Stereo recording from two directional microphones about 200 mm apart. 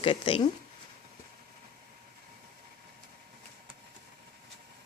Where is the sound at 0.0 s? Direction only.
25° left (ahead or behind).